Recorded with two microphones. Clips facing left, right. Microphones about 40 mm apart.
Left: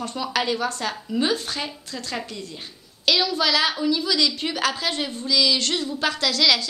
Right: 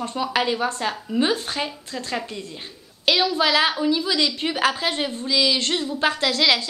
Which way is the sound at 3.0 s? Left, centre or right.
Right.